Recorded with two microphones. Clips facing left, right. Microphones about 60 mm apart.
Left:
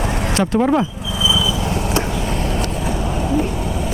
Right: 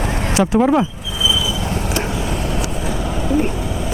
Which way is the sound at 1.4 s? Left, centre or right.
Left.